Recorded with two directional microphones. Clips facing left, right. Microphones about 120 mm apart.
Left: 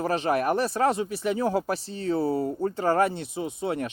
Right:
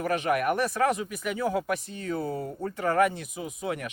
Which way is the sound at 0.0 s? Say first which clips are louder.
Left 1 dB; 30° left (ahead or behind).